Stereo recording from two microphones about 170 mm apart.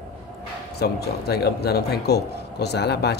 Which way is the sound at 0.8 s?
70° left (ahead or behind).